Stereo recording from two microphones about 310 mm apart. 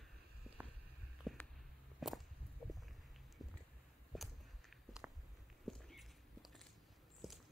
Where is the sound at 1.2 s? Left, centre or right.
Centre.